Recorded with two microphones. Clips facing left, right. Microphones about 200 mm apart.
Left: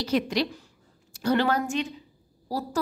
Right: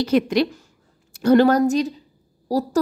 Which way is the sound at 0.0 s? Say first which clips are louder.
Right 7 dB; 55° right (ahead or behind).